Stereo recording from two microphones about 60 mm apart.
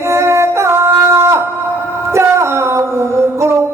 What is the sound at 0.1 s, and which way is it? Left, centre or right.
Singing, right.